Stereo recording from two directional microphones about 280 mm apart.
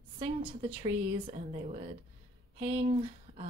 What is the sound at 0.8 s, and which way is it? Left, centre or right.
Speech, right.